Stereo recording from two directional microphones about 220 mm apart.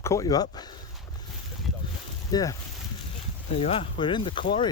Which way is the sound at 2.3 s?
15° left (ahead or behind).